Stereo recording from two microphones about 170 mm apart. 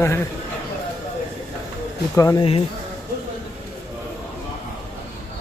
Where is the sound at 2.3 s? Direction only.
35° left (ahead or behind).